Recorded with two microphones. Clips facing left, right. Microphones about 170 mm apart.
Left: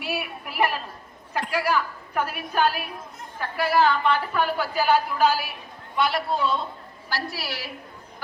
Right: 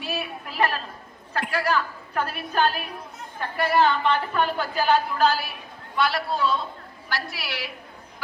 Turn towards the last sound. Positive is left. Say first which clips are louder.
# left 1 dB
turn(degrees=40)  # may be behind; listen again after turning